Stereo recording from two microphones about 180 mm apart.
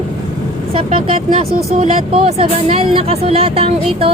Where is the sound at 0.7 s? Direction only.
30° right (ahead or behind).